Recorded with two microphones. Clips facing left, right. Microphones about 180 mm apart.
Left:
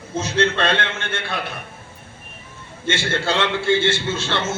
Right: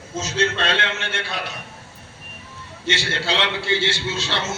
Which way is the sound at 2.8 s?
50° left (ahead or behind).